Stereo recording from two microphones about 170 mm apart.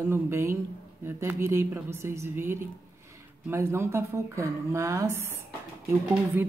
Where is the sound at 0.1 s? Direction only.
15° right (ahead or behind).